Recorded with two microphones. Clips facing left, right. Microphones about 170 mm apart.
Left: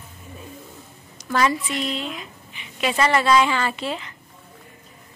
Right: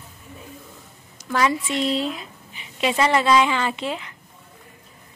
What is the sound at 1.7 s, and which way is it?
Speech, 30° right (ahead or behind).